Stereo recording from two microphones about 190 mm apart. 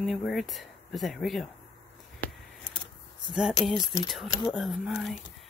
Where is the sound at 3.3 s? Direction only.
Centre (ahead or behind).